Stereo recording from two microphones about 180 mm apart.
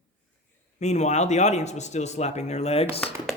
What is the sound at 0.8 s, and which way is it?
A man's voice, 40° left (ahead or behind).